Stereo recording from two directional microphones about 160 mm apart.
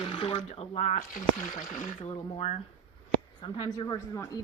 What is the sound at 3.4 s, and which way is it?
Speech, 30° left (ahead or behind).